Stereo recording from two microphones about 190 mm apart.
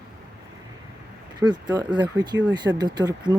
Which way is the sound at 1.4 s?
20° right (ahead or behind).